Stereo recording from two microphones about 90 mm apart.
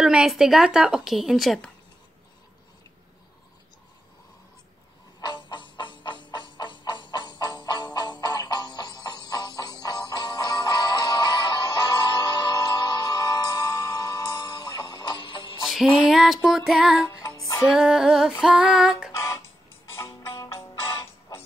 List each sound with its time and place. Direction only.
0.0 s a woman's voice: 5° right (ahead or behind)
5.2 s music: 55° left (ahead or behind)
15.6 s music: 5° right (ahead or behind)
16.0 s a woman's voice: 5° right (ahead or behind)
16.4 s female singing: 5° right (ahead or behind)
19.1 s music: 35° left (ahead or behind)